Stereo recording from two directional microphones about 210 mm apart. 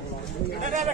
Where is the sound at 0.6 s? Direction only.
35° right (ahead or behind).